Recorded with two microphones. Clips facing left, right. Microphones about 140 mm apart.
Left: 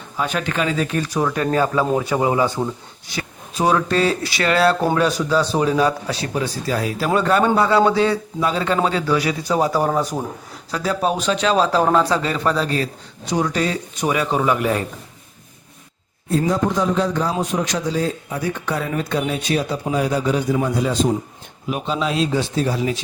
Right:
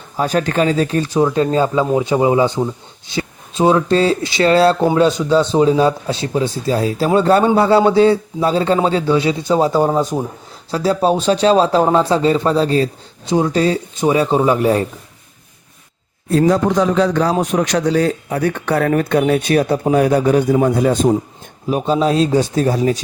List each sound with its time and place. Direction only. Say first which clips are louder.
0.2 s speech: right 6 dB; 40° right (ahead or behind)
16.3 s a man's voice: right 5 dB; 75° right (ahead or behind); by 21.2 s 50° right (ahead or behind)
21.7 s speech: right 7 dB; 35° right (ahead or behind)